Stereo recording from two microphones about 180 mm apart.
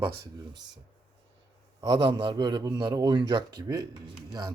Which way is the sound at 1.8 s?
25° right (ahead or behind).